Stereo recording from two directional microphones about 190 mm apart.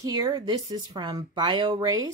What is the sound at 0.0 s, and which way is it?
A woman's voice, 20° right (ahead or behind).